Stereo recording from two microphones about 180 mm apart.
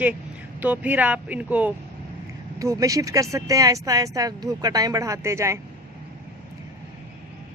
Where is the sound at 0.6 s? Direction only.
10° right (ahead or behind).